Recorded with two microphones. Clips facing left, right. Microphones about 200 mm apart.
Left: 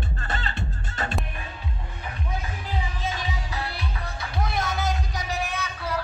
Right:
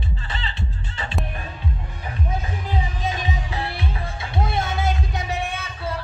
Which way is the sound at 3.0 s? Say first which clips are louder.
Right 4 dB; 20° right (ahead or behind).